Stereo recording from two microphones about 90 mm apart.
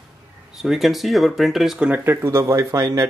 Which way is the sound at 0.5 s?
Centre (ahead or behind).